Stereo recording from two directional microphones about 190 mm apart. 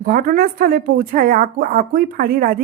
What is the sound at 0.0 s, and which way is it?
A woman's voice, 45° right (ahead or behind).